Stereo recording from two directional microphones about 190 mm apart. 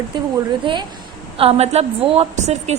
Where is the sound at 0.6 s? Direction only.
25° right (ahead or behind).